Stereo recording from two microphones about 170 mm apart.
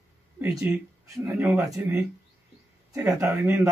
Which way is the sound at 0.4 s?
20° right (ahead or behind).